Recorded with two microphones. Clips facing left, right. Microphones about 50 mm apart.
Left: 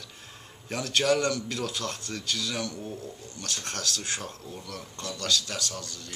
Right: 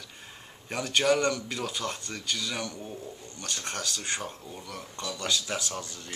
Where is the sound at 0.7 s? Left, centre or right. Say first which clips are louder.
Even; centre.